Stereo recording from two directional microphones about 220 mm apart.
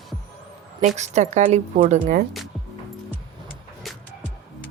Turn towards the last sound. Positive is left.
turn(degrees=0)  # may be behind; listen again after turning